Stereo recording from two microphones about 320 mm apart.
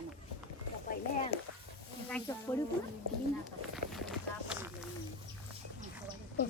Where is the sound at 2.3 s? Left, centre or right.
Centre.